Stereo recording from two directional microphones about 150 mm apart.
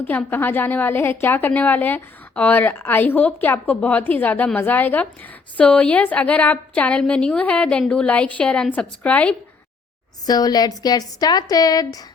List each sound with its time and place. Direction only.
0.0 s a woman's voice: 10° left (ahead or behind)
10.2 s a woman's voice: 25° left (ahead or behind)